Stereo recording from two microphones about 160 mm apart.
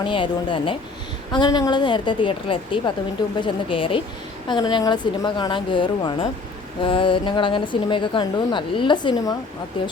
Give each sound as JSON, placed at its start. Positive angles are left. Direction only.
{"t": 0.0, "sound": "a woman's voice", "side_deg": 30}